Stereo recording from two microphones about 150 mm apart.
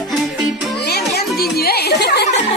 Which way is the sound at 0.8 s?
90° left.